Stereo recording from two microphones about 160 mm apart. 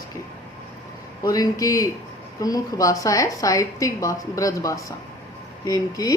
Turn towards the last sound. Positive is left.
turn(degrees=20)  # may be behind; listen again after turning